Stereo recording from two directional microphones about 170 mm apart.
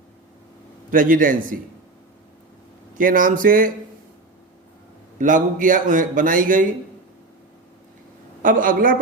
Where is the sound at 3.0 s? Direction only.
55° right (ahead or behind).